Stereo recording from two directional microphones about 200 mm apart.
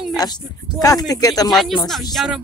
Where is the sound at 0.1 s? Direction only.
20° left (ahead or behind).